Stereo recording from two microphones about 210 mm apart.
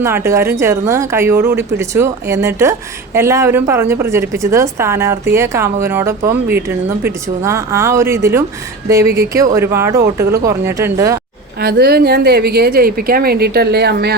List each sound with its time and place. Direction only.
0.0 s a woman's voice: 10° right (ahead or behind)
11.6 s a woman's voice: 50° right (ahead or behind)